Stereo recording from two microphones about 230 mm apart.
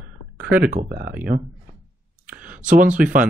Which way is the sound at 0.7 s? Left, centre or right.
Right.